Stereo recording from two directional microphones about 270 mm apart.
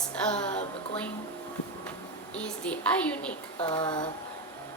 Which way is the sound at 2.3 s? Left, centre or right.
Centre.